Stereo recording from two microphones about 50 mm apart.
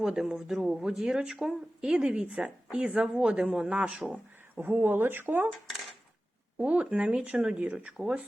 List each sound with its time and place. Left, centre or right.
0.0 s speech: centre
0.9 s speech: centre
4.6 s speech: right
6.6 s speech: right